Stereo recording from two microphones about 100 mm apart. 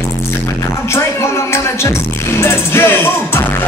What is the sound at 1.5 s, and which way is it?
Music, 25° left (ahead or behind).